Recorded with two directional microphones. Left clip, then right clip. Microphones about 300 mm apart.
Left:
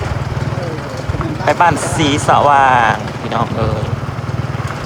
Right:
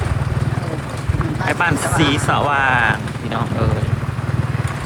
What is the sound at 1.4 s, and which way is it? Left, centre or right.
Speech, centre.